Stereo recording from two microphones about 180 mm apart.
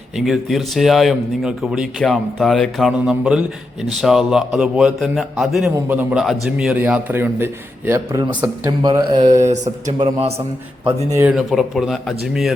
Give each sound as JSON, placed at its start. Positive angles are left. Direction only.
{"t": 0.3, "sound": "a man's voice", "side_deg": 0}
{"t": 8.8, "sound": "speech", "side_deg": -25}
{"t": 9.4, "sound": "speech", "side_deg": -40}
{"t": 11.1, "sound": "a man's voice", "side_deg": -15}
{"t": 11.3, "sound": "speech", "side_deg": 0}